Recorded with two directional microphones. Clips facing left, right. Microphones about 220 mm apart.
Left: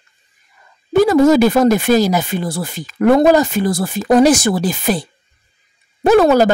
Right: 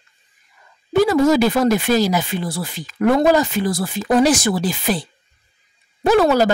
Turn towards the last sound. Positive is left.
turn(degrees=50)  # may be behind; listen again after turning